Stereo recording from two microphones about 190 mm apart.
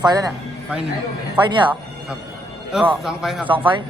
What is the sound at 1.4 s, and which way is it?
Speech, 25° right (ahead or behind).